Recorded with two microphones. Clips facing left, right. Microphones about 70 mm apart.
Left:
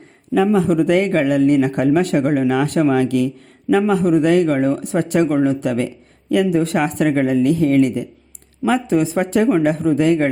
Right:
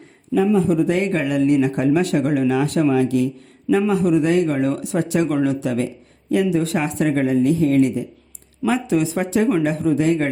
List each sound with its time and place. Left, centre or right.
0.7 s speech: left
2.9 s speech: left
5.6 s speech: left